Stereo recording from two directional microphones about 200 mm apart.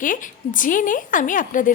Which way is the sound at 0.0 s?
40° left (ahead or behind).